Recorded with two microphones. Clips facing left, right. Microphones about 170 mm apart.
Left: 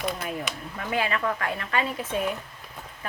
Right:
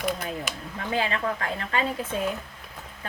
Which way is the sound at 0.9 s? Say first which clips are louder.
Even; 30° right (ahead or behind).